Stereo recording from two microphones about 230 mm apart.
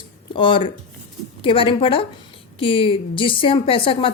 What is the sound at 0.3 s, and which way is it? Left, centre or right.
A woman's voice, left.